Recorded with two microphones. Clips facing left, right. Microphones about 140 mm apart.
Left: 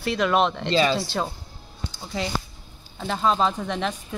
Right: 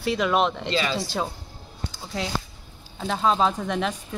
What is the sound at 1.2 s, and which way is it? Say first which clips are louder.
Speech: left 1 dB; 5° right (ahead or behind).